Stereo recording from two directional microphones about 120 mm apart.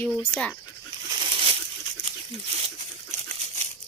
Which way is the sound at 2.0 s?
60° right (ahead or behind).